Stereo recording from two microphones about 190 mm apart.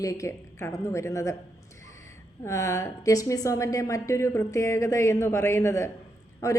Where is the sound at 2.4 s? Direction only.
15° left (ahead or behind).